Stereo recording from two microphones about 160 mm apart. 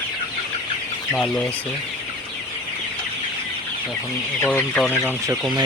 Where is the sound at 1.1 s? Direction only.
5° left (ahead or behind).